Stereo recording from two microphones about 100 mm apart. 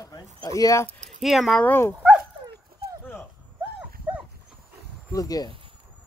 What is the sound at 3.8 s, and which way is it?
Dog, 15° right (ahead or behind).